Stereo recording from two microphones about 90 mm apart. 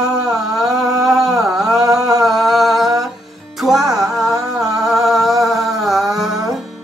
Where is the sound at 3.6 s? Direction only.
5° right (ahead or behind).